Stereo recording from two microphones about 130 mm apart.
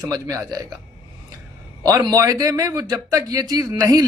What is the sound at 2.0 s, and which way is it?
Speech, 30° right (ahead or behind).